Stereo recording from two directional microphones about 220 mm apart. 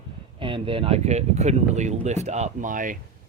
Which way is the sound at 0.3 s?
25° right (ahead or behind).